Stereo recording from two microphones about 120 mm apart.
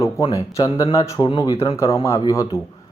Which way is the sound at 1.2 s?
40° left (ahead or behind).